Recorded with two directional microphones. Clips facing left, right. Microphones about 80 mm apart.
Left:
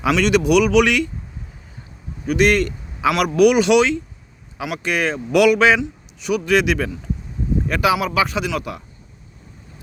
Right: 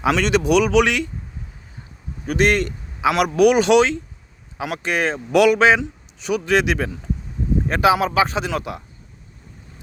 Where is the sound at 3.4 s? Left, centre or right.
Right.